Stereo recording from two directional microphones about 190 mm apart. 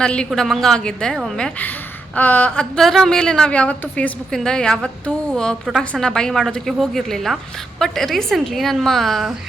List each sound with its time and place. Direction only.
0.0 s a woman's voice: 5° left (ahead or behind)